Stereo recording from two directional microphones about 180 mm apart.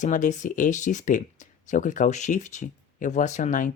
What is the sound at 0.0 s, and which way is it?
Speech, 45° left (ahead or behind).